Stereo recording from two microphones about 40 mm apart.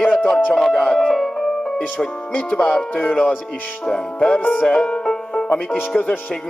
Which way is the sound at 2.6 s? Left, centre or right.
Centre.